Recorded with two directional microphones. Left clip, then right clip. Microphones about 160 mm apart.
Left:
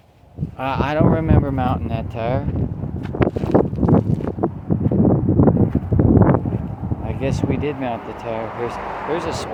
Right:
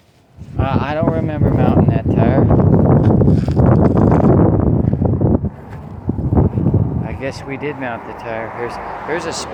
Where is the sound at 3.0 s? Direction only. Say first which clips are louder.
Right 5 dB; 50° right (ahead or behind).